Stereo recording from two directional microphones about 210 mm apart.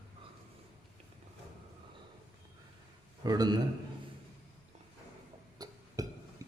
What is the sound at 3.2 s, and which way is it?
Speech, 20° right (ahead or behind).